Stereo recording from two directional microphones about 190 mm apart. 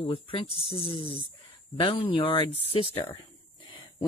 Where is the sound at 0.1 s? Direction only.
30° left (ahead or behind).